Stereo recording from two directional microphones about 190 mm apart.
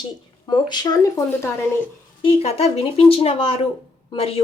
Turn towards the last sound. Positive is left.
turn(degrees=30)  # may be behind; listen again after turning